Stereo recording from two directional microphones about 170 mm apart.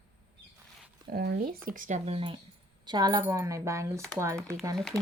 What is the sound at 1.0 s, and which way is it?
Speech, 70° right (ahead or behind).